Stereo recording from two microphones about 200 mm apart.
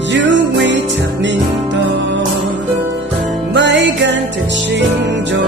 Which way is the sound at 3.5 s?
60° right (ahead or behind).